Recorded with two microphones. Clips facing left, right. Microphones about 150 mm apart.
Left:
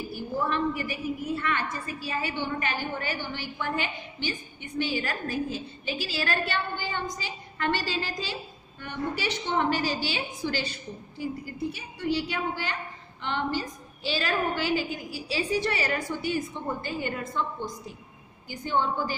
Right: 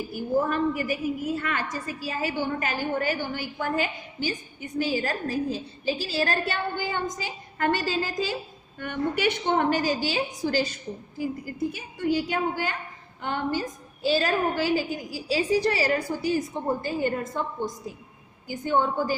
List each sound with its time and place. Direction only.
0.1 s a woman's voice: 45° right (ahead or behind)